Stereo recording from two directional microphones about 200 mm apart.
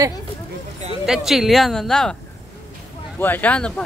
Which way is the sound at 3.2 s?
10° left (ahead or behind).